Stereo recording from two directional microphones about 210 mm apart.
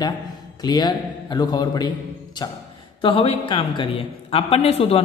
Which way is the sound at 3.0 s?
25° left (ahead or behind).